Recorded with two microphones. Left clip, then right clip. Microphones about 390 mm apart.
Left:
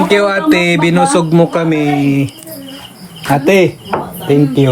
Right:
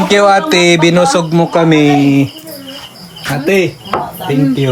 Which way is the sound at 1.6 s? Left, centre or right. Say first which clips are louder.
Right 5 dB; right.